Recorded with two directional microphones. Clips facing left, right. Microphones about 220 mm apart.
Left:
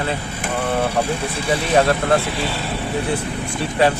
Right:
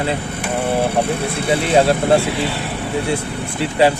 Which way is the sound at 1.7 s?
30° right (ahead or behind).